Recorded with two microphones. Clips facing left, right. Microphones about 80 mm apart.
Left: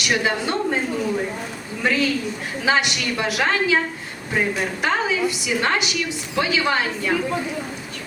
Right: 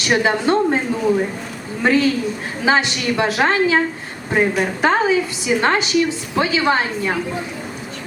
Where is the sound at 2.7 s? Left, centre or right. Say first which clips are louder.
Right 4 dB; right.